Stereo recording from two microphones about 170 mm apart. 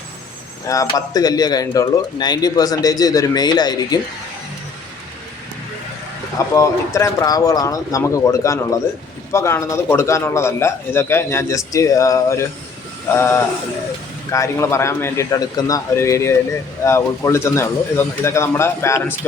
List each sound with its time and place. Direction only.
0.7 s a man's voice: 20° left (ahead or behind)
6.5 s a man's voice: 15° left (ahead or behind)